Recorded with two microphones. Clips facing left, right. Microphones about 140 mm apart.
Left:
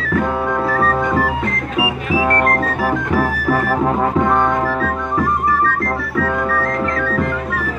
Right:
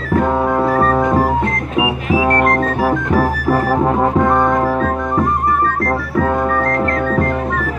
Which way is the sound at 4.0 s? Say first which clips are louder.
Right 2 dB; 20° right (ahead or behind).